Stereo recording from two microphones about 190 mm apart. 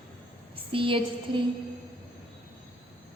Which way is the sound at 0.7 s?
25° right (ahead or behind).